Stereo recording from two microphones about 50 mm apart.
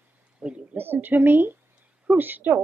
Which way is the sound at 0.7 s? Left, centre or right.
Right.